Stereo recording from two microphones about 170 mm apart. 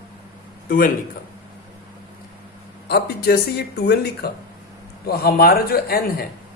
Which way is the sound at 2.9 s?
65° left (ahead or behind).